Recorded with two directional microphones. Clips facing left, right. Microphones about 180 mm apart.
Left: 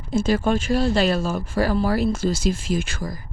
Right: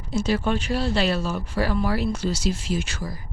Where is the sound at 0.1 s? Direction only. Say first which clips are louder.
Left 3 dB; 50° left (ahead or behind).